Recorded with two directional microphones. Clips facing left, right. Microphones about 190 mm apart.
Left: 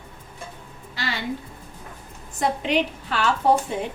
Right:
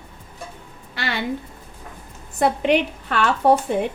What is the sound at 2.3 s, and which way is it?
Speech, 60° right (ahead or behind).